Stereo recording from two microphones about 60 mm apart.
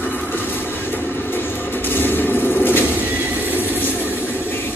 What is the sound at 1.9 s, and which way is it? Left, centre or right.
Vehicle, left.